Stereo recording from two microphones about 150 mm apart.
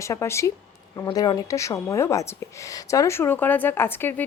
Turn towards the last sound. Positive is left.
turn(degrees=15)  # may be behind; listen again after turning